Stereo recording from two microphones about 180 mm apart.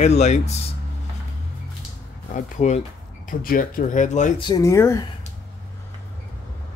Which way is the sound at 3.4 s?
50° left (ahead or behind).